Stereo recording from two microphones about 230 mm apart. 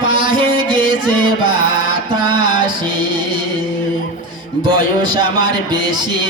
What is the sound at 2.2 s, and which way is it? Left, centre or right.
Music, centre.